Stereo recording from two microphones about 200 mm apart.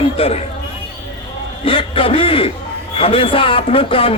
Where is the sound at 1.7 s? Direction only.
25° left (ahead or behind).